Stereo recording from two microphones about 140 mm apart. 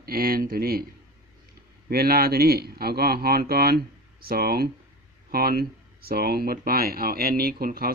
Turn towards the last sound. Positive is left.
turn(degrees=-90)